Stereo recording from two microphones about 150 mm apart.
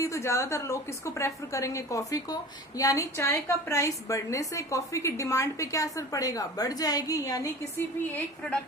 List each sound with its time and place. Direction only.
0.0 s a woman's voice: 20° left (ahead or behind)